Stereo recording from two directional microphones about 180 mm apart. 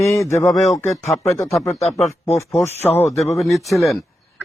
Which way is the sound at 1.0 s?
35° left (ahead or behind).